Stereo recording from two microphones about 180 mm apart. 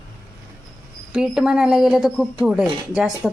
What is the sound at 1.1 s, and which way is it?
Speech, 5° right (ahead or behind).